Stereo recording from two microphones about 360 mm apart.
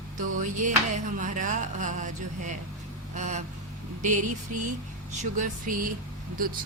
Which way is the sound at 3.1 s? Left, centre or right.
Centre.